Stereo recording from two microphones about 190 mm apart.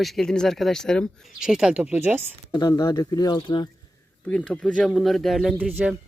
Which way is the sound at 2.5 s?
20° left (ahead or behind).